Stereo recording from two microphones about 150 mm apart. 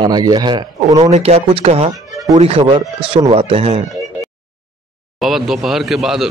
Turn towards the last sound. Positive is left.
turn(degrees=0)  # may be behind; listen again after turning